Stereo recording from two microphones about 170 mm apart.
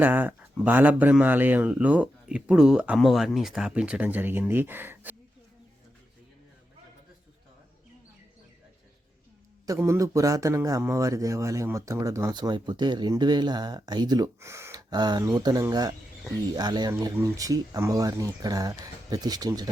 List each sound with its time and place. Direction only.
0.0 s speech: 10° right (ahead or behind)
9.6 s a man's voice: 15° right (ahead or behind)